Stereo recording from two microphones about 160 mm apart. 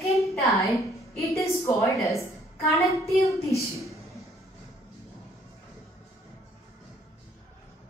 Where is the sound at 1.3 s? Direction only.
20° left (ahead or behind).